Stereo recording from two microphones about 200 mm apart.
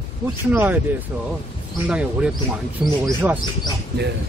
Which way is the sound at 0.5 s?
10° right (ahead or behind).